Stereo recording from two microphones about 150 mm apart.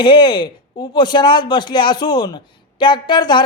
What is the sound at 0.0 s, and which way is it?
Speech, 30° left (ahead or behind).